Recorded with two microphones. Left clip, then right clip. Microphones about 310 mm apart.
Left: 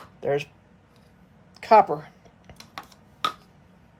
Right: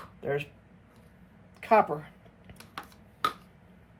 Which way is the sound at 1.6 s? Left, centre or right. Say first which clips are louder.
Left 6 dB; centre.